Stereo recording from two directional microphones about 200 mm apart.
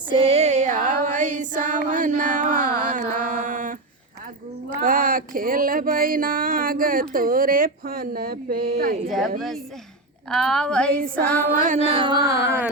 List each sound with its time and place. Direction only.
0.1 s female singing: 30° right (ahead or behind)
4.8 s a sound: 45° right (ahead or behind)
9.0 s a woman's voice: centre (ahead or behind)
11.1 s female singing: 5° left (ahead or behind)
11.6 s music: 40° right (ahead or behind)